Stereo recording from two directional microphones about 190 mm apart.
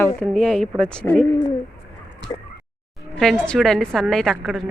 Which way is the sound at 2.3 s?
20° left (ahead or behind).